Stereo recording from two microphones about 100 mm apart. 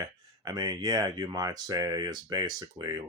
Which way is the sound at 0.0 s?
40° right (ahead or behind).